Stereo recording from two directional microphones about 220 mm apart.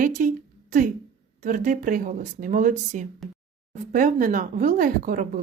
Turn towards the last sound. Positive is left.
turn(degrees=-40)  # may be behind; listen again after turning